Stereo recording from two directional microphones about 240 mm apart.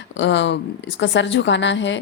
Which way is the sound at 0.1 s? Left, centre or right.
Left.